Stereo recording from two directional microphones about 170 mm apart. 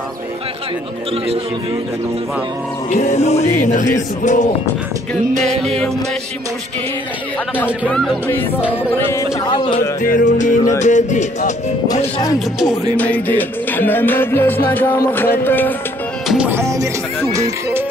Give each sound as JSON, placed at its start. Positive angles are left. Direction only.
{"t": 2.9, "sound": "music", "side_deg": 45}
{"t": 5.3, "sound": "music", "side_deg": -45}
{"t": 5.6, "sound": "speech", "side_deg": 5}
{"t": 7.9, "sound": "speech", "side_deg": 0}
{"t": 9.5, "sound": "speech", "side_deg": 25}
{"t": 10.0, "sound": "music", "side_deg": 50}
{"t": 11.9, "sound": "speech", "side_deg": 20}
{"t": 12.9, "sound": "music", "side_deg": 10}
{"t": 16.3, "sound": "music", "side_deg": -10}
{"t": 17.3, "sound": "speech", "side_deg": -20}